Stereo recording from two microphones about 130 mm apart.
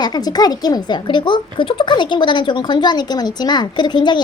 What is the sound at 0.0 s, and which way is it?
Speech, 30° left (ahead or behind).